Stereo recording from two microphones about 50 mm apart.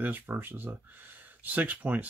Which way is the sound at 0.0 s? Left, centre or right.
Right.